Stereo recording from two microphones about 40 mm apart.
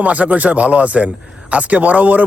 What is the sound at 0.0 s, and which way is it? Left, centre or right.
Speech, right.